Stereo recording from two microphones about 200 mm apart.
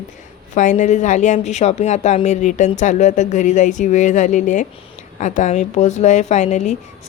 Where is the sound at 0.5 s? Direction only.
40° left (ahead or behind).